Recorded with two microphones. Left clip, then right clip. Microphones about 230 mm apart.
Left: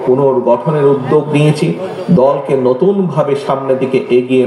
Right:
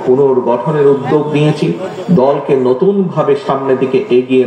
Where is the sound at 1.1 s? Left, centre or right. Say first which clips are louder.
Left 1 dB; left.